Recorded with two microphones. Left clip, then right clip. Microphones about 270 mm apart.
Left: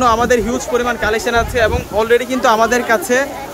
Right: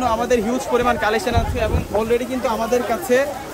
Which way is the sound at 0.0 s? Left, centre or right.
Centre.